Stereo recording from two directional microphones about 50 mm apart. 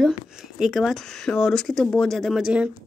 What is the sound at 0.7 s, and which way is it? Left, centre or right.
Speech, centre.